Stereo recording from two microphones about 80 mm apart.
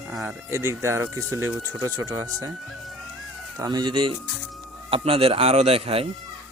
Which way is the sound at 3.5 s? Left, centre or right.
Right.